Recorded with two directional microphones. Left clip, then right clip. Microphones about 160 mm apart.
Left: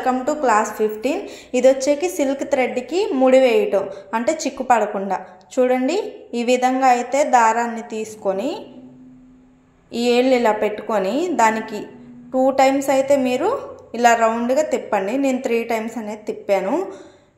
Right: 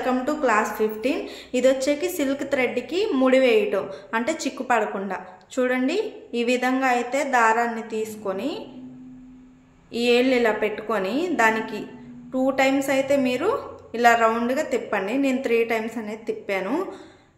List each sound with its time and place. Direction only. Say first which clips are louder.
0.0 s a woman's voice: left 4 dB; 15° left (ahead or behind)
9.9 s a woman's voice: left 3 dB; 20° left (ahead or behind)